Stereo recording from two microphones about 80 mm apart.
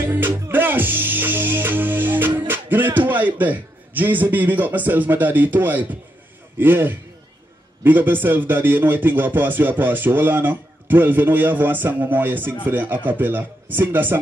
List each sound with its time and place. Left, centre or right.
0.0 s music: right
6.6 s speech: right